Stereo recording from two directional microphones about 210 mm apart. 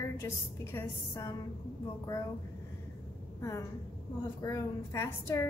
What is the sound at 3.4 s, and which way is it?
A woman's voice, 15° left (ahead or behind).